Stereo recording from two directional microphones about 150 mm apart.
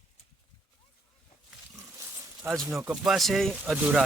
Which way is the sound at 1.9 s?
20° right (ahead or behind).